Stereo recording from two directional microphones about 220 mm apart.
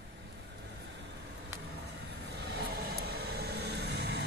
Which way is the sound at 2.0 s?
50° right (ahead or behind).